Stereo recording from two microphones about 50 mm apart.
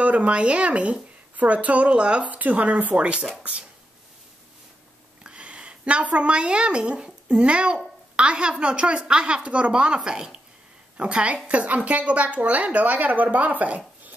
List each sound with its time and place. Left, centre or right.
0.0 s speech: right
5.2 s a woman's voice: right